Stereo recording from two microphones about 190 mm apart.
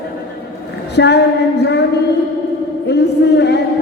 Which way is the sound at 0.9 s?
65° left (ahead or behind).